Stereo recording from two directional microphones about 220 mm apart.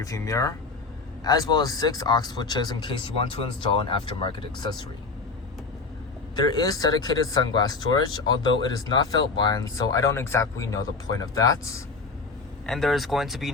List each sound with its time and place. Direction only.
0.0 s speech: 15° left (ahead or behind)
6.3 s speech: 20° left (ahead or behind)
12.6 s speech: centre (ahead or behind)